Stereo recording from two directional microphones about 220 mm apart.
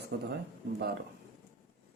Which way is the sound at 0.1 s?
55° right (ahead or behind).